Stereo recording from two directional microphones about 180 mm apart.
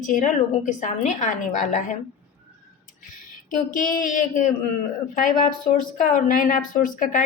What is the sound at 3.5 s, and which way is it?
A woman's voice, 50° left (ahead or behind).